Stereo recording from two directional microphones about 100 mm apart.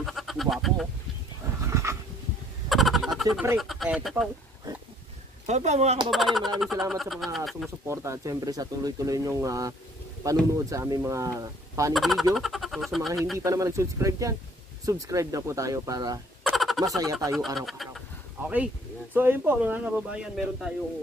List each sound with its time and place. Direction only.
0.0 s goat: centre (ahead or behind)
1.6 s dog: 30° right (ahead or behind)
2.7 s a sound: centre (ahead or behind)
5.7 s speech: 90° right
6.0 s a sound: centre (ahead or behind)
7.8 s speech: 30° right (ahead or behind)
11.9 s a sound: centre (ahead or behind)
12.4 s speech: centre (ahead or behind)
13.4 s speech: 35° right (ahead or behind)
16.4 s fowl: centre (ahead or behind)
16.8 s speech: 35° right (ahead or behind)
17.6 s a sound: centre (ahead or behind)
19.1 s speech: 20° right (ahead or behind)